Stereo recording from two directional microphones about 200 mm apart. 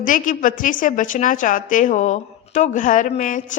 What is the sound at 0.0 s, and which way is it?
A woman's voice, 40° left (ahead or behind).